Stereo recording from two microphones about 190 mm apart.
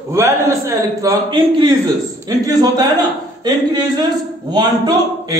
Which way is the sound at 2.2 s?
20° right (ahead or behind).